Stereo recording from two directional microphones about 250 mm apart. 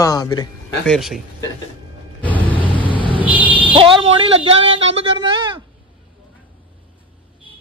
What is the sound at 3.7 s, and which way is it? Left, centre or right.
Speech, right.